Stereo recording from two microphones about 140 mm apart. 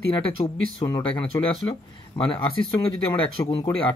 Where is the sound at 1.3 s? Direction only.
25° left (ahead or behind).